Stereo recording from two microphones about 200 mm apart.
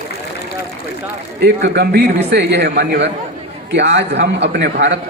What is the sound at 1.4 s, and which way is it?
A man's voice, 55° right (ahead or behind).